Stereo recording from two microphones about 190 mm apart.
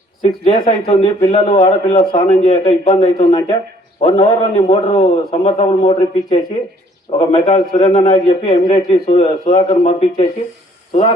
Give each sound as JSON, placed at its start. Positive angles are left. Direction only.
{"t": 0.2, "sound": "a man's voice", "side_deg": 25}
{"t": 2.1, "sound": "a man's voice", "side_deg": 40}
{"t": 2.8, "sound": "a man's voice", "side_deg": 25}
{"t": 7.2, "sound": "a man's voice", "side_deg": 30}
{"t": 8.0, "sound": "a man's voice", "side_deg": 20}
{"t": 8.7, "sound": "a man's voice", "side_deg": 35}